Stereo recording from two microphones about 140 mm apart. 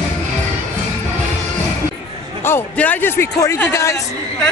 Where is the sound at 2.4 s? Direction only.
15° left (ahead or behind).